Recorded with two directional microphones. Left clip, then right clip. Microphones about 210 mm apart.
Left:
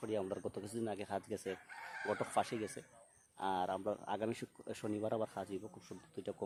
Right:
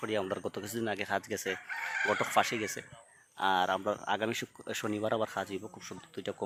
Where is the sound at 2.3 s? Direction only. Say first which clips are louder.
Right 8 dB; centre (ahead or behind).